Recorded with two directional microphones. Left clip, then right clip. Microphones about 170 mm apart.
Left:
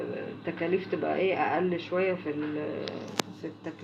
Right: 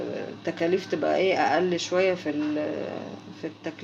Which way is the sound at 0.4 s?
70° right (ahead or behind).